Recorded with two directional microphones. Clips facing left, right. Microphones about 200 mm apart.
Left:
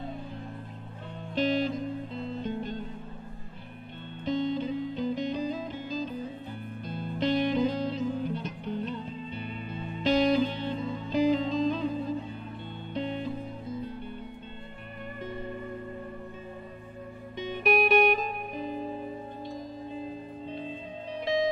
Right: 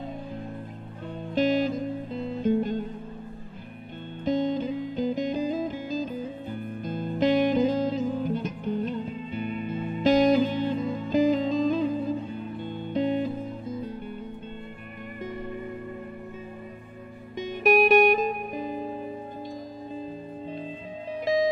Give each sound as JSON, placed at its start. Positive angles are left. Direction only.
{"t": 1.3, "sound": "music", "side_deg": -45}
{"t": 4.2, "sound": "music", "side_deg": -45}
{"t": 12.9, "sound": "music", "side_deg": -45}
{"t": 17.4, "sound": "music", "side_deg": -45}
{"t": 21.2, "sound": "music", "side_deg": -45}